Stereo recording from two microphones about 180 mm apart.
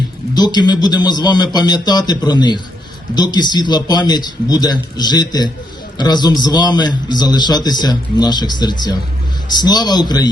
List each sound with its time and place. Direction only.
0.3 s a man's voice: 25° left (ahead or behind)